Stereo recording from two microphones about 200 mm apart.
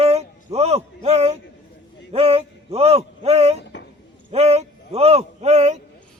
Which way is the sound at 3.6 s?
60° left (ahead or behind).